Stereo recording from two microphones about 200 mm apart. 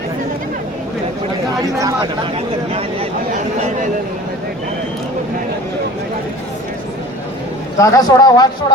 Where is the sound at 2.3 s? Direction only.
30° right (ahead or behind).